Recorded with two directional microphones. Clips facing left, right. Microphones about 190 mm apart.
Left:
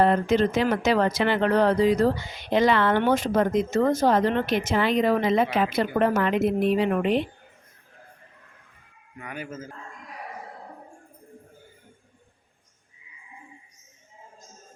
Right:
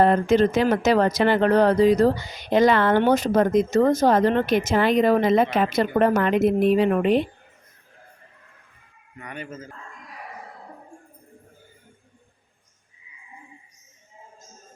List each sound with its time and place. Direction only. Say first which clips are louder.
0.0 s speech: right 3 dB; 45° right (ahead or behind)
9.1 s a man's voice: even; 5° left (ahead or behind)